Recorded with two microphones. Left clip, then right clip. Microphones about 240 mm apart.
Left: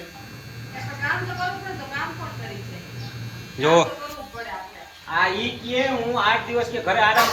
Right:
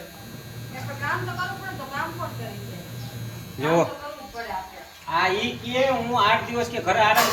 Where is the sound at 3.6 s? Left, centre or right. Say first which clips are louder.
Left 4 dB; centre.